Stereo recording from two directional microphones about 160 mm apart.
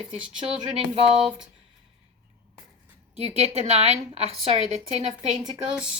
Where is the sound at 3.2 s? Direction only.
40° right (ahead or behind).